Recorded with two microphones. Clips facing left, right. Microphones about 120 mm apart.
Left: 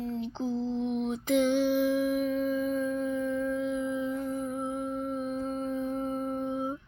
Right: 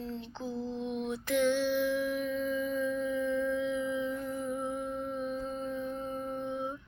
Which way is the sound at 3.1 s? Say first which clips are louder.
Left 1 dB; 5° left (ahead or behind).